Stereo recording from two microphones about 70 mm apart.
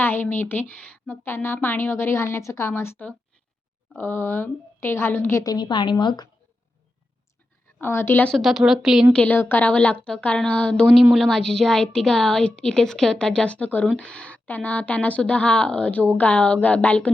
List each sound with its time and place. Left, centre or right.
0.0 s a woman's voice: left
1.1 s a woman's voice: left
5.4 s a woman's voice: left
7.8 s a woman's voice: left
8.3 s speech: centre
9.1 s a woman's voice: left
11.1 s a woman's voice: centre; by 17.1 s left